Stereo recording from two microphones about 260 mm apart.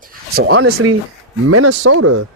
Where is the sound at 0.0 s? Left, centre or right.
Right.